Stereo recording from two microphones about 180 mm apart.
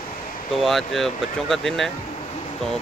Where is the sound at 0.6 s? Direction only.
Centre (ahead or behind).